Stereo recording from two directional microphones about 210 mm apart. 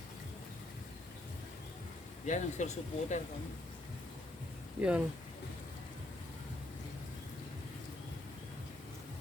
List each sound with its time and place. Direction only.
2.2 s speech: 35° left (ahead or behind)
4.8 s speech: 5° right (ahead or behind)